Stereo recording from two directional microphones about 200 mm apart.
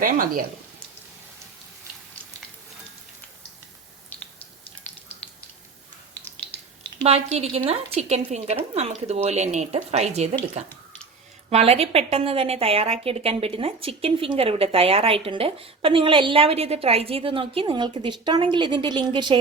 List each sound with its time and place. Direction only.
0.0 s speech: 45° right (ahead or behind)
7.0 s speech: 30° right (ahead or behind)
11.4 s a woman's voice: 30° right (ahead or behind)